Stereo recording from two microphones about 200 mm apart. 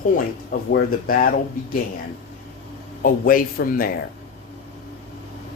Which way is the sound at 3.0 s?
45° left (ahead or behind).